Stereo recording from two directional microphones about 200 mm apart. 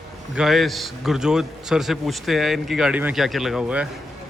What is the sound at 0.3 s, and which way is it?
A man's voice, centre (ahead or behind).